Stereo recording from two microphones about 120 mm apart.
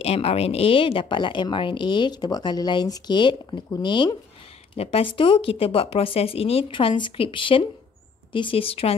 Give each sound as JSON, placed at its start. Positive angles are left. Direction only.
{"t": 0.0, "sound": "speech", "side_deg": 55}
{"t": 4.7, "sound": "speech", "side_deg": 50}